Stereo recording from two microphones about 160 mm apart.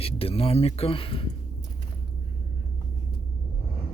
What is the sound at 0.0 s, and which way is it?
Speech, 40° left (ahead or behind).